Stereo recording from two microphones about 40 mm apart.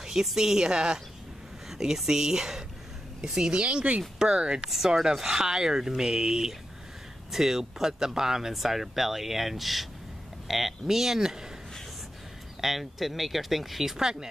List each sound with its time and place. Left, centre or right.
0.0 s speech: centre
3.6 s speech: right
4.2 s speech: centre
4.6 s speech: centre
12.5 s speech: centre